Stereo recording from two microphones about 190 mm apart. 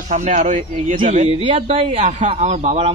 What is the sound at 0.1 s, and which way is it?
Speech, 40° right (ahead or behind).